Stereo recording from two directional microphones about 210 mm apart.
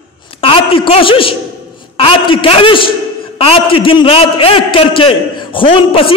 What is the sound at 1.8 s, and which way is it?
A man's voice, 25° left (ahead or behind).